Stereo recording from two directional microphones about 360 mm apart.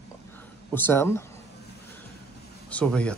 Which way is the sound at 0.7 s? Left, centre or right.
Centre.